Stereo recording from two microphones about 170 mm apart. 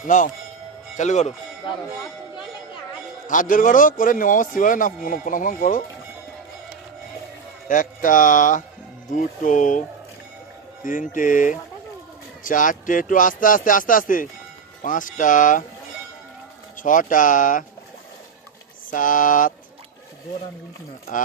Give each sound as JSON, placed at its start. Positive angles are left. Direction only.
{"t": 0.1, "sound": "a man's voice", "side_deg": 50}
{"t": 3.2, "sound": "a man's voice", "side_deg": 50}
{"t": 7.7, "sound": "a man's voice", "side_deg": 50}
{"t": 10.8, "sound": "a man's voice", "side_deg": 50}
{"t": 16.8, "sound": "a man's voice", "side_deg": 50}
{"t": 18.9, "sound": "a man's voice", "side_deg": 50}